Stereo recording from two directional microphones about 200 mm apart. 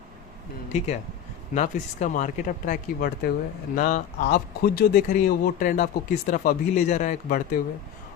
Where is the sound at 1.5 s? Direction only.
40° left (ahead or behind).